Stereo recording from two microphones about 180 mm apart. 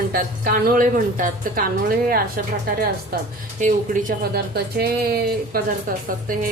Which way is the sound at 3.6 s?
45° right (ahead or behind).